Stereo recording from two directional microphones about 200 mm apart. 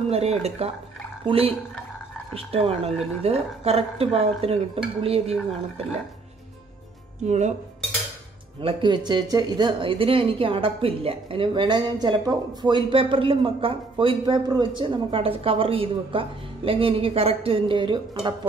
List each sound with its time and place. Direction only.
0.1 s speech: 30° right (ahead or behind)
7.2 s speech: 35° right (ahead or behind)
8.5 s speech: 25° right (ahead or behind)